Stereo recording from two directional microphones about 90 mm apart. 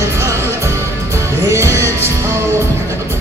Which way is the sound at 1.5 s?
30° right (ahead or behind).